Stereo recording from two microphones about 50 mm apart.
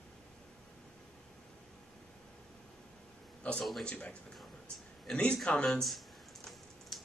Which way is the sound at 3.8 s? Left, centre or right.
Left.